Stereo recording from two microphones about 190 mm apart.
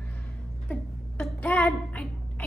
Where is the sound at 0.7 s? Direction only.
10° left (ahead or behind).